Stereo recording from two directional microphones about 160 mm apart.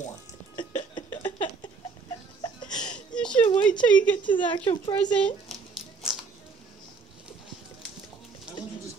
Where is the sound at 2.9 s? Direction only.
5° left (ahead or behind).